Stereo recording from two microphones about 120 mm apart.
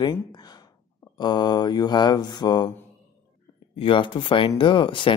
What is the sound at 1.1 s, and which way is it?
Speech, 35° left (ahead or behind).